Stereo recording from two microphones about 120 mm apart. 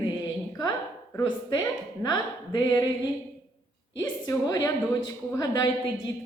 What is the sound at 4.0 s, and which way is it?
A woman's voice, 30° left (ahead or behind).